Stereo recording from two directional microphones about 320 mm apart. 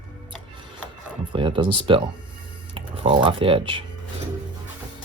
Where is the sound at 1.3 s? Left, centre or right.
Centre.